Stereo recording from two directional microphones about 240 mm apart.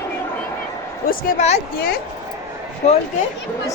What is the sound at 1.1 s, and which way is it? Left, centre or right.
Speech, left.